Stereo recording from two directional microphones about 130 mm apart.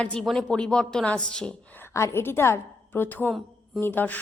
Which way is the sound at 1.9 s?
20° left (ahead or behind).